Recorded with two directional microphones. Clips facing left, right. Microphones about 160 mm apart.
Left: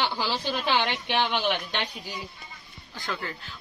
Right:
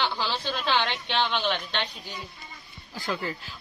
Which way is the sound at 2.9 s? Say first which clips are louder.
Right 3 dB; 10° right (ahead or behind).